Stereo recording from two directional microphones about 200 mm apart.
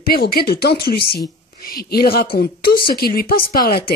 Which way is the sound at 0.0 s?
50° left (ahead or behind).